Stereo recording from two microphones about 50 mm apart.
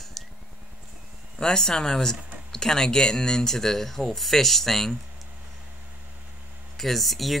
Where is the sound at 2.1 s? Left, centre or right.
Right.